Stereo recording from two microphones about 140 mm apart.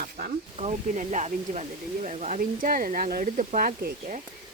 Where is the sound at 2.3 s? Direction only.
85° right.